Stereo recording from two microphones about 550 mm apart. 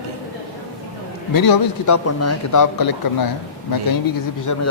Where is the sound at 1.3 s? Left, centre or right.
Left.